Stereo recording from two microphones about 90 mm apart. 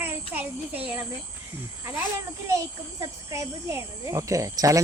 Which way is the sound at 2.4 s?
35° right (ahead or behind).